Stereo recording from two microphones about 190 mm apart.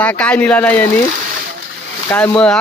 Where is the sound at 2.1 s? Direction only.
10° left (ahead or behind).